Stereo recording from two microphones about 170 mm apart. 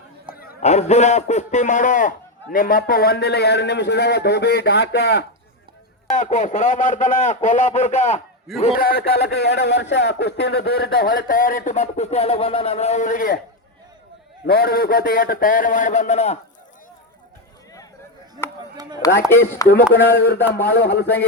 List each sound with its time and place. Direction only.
0.6 s a man's voice: 40° left (ahead or behind); by 5.2 s 80° left
6.1 s speech: 45° left (ahead or behind)
8.5 s a man's voice: centre (ahead or behind)
8.8 s a man's voice: 70° left (ahead or behind)
14.4 s speech: 65° left (ahead or behind); by 16.4 s 40° left (ahead or behind)
19.0 s speech: 20° left (ahead or behind)
19.9 s a man's voice: 65° left (ahead or behind)
20.7 s a man's voice: 75° left (ahead or behind)